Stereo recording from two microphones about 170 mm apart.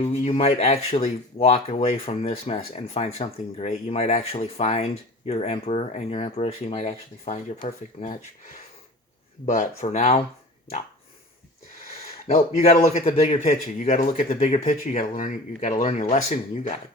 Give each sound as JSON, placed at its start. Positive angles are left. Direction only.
{"t": 0.0, "sound": "speech", "side_deg": 40}
{"t": 9.5, "sound": "a man's voice", "side_deg": 45}
{"t": 12.9, "sound": "a man's voice", "side_deg": 40}